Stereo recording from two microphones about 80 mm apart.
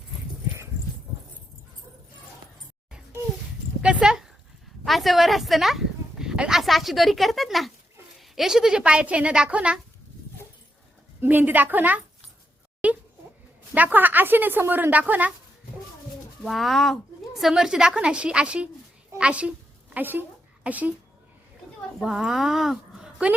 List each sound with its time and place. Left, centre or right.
3.8 s a sound: centre
4.9 s a woman's voice: centre
11.2 s a woman's voice: right
12.8 s a sound: centre
13.7 s a woman's voice: right
16.4 s a woman's voice: centre
22.0 s speech: centre